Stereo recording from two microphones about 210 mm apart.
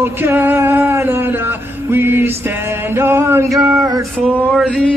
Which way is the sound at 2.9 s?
10° right (ahead or behind).